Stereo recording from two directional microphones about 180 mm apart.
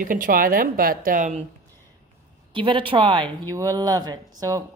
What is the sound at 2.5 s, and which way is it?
Speech, 25° right (ahead or behind).